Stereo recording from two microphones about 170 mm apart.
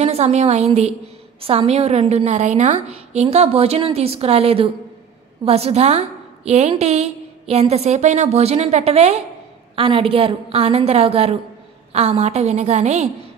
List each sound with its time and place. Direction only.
0.0 s a woman's voice: 40° right (ahead or behind)